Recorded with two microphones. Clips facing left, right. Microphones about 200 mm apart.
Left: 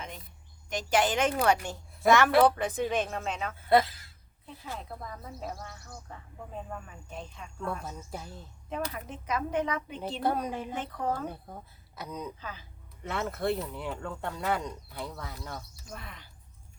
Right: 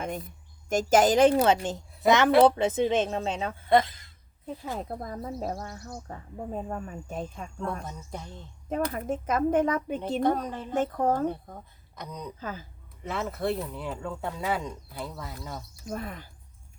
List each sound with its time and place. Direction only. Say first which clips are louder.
0.7 s speech: right 6 dB; 45° right (ahead or behind)
1.4 s a woman's voice: right 3 dB; 20° right (ahead or behind)
3.7 s speech: right 1 dB; 5° left (ahead or behind)
4.4 s speech: right 7 dB; 45° right (ahead or behind)
7.7 s speech: right 1 dB; 5° left (ahead or behind)
8.7 s speech: right 7 dB; 50° right (ahead or behind)
10.2 s speech: even; 10° left (ahead or behind)
10.8 s speech: right 11 dB; 45° right (ahead or behind)
11.3 s speech: right 7 dB; 5° left (ahead or behind)
12.4 s speech: right 6 dB; 45° right (ahead or behind)
13.0 s speech: right 1 dB; centre (ahead or behind)
15.9 s speech: right 11 dB; 45° right (ahead or behind)